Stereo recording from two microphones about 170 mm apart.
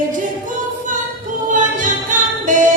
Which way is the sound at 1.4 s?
50° right (ahead or behind).